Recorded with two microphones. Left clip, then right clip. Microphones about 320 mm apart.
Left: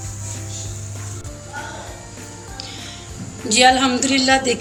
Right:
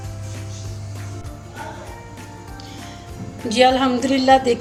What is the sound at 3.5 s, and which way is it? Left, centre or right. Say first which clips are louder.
A woman's voice: left 2 dB; right.